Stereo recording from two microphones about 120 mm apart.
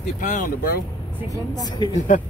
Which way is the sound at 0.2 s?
90° left.